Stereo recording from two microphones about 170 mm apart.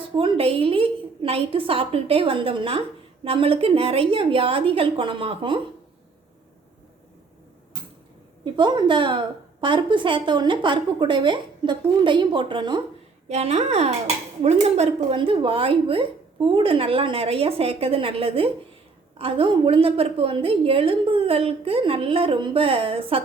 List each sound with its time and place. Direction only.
0.2 s a woman's voice: 30° right (ahead or behind)
8.5 s a woman's voice: 25° right (ahead or behind)
13.2 s a woman's voice: 40° right (ahead or behind)